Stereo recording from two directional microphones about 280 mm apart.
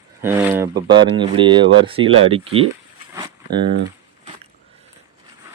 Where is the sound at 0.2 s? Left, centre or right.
Centre.